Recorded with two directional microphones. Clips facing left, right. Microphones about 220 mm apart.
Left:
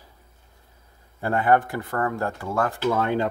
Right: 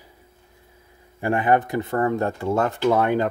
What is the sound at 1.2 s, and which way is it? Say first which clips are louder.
Speech: right 1 dB; 15° right (ahead or behind).